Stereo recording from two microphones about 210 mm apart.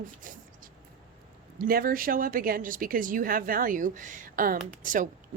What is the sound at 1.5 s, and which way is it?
A woman's voice, 45° right (ahead or behind).